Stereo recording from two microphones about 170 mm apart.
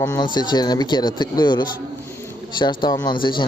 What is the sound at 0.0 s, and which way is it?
A man's voice, 20° left (ahead or behind).